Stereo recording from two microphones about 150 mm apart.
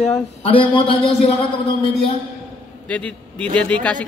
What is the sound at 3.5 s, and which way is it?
Speech, 10° left (ahead or behind).